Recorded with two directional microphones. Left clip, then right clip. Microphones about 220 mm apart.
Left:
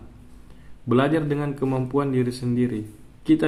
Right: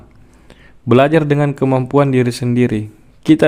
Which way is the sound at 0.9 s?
50° right (ahead or behind).